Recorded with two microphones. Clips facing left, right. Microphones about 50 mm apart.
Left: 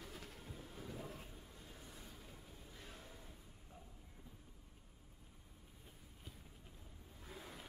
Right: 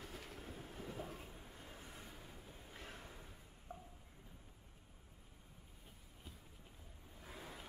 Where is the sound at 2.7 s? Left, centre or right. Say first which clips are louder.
Right 4 dB; right.